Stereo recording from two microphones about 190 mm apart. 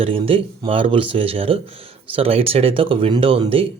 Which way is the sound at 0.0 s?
30° right (ahead or behind).